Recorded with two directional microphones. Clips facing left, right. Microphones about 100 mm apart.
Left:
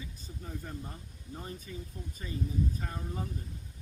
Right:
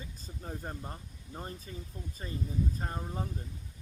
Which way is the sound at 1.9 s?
25° right (ahead or behind).